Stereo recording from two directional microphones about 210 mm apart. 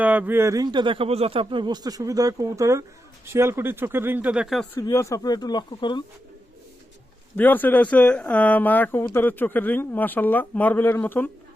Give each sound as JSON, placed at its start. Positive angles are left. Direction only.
{"t": 0.0, "sound": "a man's voice", "side_deg": -10}
{"t": 4.8, "sound": "speech", "side_deg": 15}
{"t": 7.3, "sound": "speech", "side_deg": 10}